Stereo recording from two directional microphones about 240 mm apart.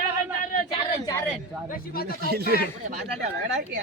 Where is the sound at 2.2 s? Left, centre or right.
Right.